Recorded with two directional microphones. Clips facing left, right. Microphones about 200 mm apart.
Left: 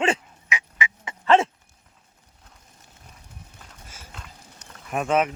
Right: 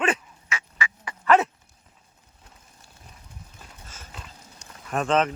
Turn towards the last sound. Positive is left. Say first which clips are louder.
# even
turn(degrees=10)  # may be behind; listen again after turning